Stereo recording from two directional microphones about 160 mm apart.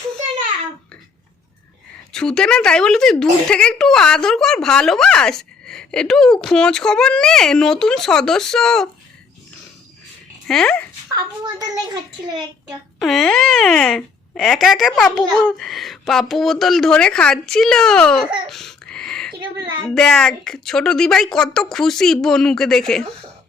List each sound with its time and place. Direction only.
2.1 s speech: 5° left (ahead or behind)
10.4 s speech: 5° left (ahead or behind)
11.1 s a child's voice: 20° right (ahead or behind)
13.0 s speech: centre (ahead or behind)
18.4 s a sound: centre (ahead or behind)
19.9 s speech: 5° left (ahead or behind)